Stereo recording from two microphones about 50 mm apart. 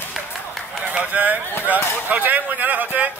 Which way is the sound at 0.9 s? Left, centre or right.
Right.